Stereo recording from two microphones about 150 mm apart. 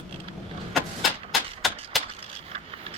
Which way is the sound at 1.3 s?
Centre (ahead or behind).